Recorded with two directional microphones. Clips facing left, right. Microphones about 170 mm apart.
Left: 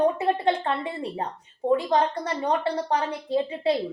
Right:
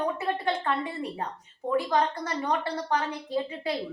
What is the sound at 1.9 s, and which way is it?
A woman's voice, 30° left (ahead or behind).